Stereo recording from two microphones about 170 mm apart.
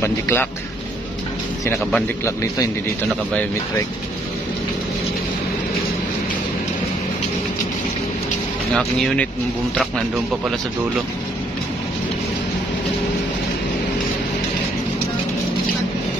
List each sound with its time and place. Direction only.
0.0 s speech: 10° left (ahead or behind)
1.8 s speech: 5° left (ahead or behind)
2.4 s a man's voice: 20° left (ahead or behind)
8.7 s speech: 5° left (ahead or behind)